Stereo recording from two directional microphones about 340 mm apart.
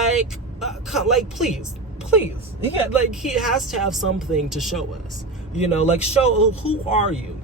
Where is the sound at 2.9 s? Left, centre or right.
Centre.